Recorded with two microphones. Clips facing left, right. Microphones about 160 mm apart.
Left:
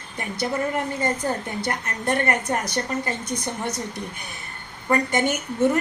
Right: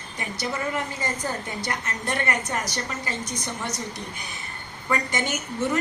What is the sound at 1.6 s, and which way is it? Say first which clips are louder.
A woman's voice: left 5 dB; 55° left (ahead or behind).